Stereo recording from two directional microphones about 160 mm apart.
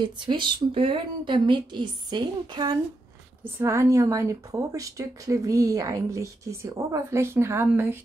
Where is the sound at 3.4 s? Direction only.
15° right (ahead or behind).